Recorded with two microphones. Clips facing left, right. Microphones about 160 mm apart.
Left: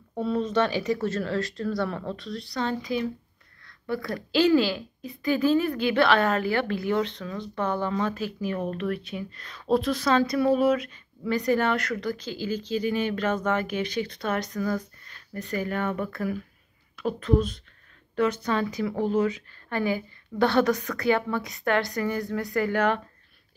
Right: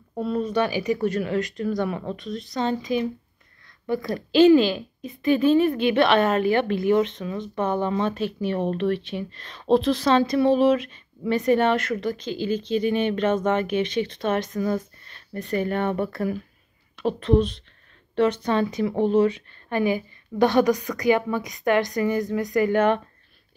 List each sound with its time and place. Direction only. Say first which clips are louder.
0.1 s a woman's voice: right 1 dB; 5° right (ahead or behind)
3.6 s a sound: right 4 dB; 15° right (ahead or behind)
4.1 s a woman's voice: right 6 dB; 20° right (ahead or behind)